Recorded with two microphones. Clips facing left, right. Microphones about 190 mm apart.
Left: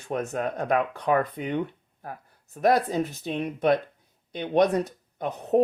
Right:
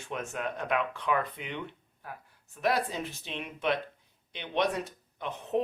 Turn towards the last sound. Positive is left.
turn(degrees=40)  # may be behind; listen again after turning